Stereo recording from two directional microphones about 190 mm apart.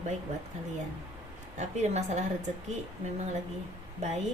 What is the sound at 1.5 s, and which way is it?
Speech, 35° right (ahead or behind).